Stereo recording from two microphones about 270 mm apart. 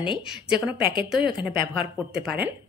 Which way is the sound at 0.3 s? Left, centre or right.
Centre.